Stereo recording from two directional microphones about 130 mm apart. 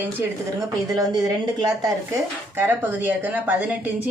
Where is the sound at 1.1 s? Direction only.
30° right (ahead or behind).